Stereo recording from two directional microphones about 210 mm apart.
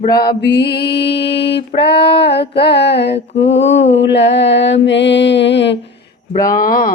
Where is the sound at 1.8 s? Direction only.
50° left (ahead or behind).